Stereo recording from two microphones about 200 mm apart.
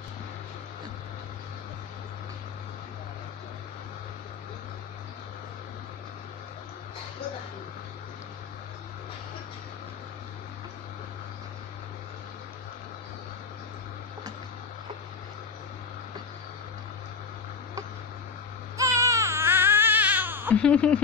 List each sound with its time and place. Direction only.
18.8 s baby cry: 15° right (ahead or behind)
20.5 s speech: 5° left (ahead or behind)